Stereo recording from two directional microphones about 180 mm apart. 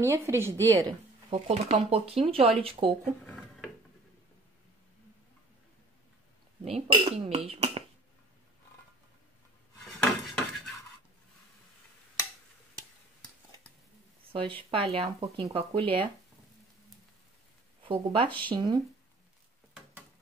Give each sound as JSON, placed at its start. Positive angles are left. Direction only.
{"t": 0.0, "sound": "a woman's voice", "side_deg": -15}
{"t": 1.3, "sound": "speech", "side_deg": -35}
{"t": 3.3, "sound": "a sound", "side_deg": 0}
{"t": 6.6, "sound": "speech", "side_deg": -30}
{"t": 9.9, "sound": "dishes", "side_deg": 5}
{"t": 14.7, "sound": "speech", "side_deg": -30}
{"t": 17.8, "sound": "speech", "side_deg": -30}